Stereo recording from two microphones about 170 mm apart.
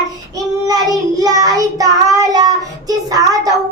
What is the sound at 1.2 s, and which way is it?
Child singing, 20° right (ahead or behind).